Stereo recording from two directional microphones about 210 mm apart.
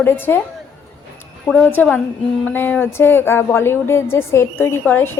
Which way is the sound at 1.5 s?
5° left (ahead or behind).